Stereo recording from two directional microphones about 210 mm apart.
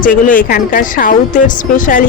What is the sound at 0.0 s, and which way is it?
Speech, 40° left (ahead or behind).